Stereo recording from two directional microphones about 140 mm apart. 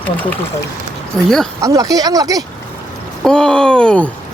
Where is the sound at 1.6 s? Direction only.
25° right (ahead or behind).